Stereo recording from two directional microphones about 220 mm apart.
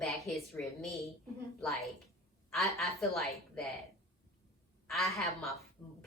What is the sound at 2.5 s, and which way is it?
A woman's voice, centre (ahead or behind).